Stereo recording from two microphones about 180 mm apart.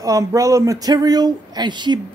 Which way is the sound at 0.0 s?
20° right (ahead or behind).